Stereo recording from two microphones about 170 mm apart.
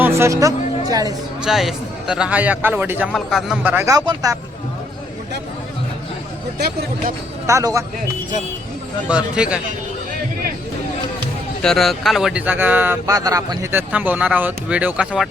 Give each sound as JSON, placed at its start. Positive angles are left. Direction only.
{"t": 0.0, "sound": "speech", "side_deg": -15}
{"t": 1.4, "sound": "a man's voice", "side_deg": 0}
{"t": 3.1, "sound": "a man's voice", "side_deg": 0}
{"t": 6.6, "sound": "speech", "side_deg": -70}
{"t": 7.4, "sound": "speech", "side_deg": -20}
{"t": 9.0, "sound": "speech", "side_deg": -5}
{"t": 11.6, "sound": "a man's voice", "side_deg": 0}